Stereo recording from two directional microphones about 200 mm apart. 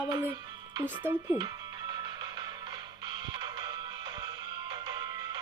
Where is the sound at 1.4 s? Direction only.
20° right (ahead or behind).